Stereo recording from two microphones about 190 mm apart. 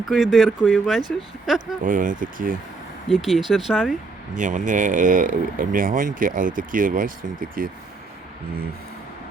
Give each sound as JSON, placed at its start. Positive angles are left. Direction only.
{"t": 0.0, "sound": "speech", "side_deg": 0}
{"t": 1.8, "sound": "speech", "side_deg": -45}
{"t": 3.1, "sound": "speech", "side_deg": 0}
{"t": 4.4, "sound": "speech", "side_deg": -40}